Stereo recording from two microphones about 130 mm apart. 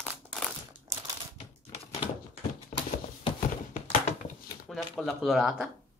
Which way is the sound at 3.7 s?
70° left (ahead or behind).